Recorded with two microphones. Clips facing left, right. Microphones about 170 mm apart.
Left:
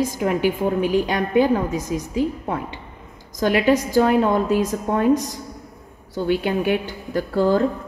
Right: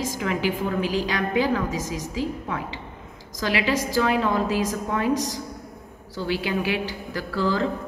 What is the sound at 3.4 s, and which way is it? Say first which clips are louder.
Speech: left 6 dB; 50° left (ahead or behind).